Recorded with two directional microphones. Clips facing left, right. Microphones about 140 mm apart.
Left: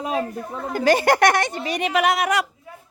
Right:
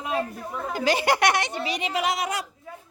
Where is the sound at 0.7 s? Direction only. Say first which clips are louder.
Left 5 dB; 50° left (ahead or behind); by 2.5 s 75° left (ahead or behind).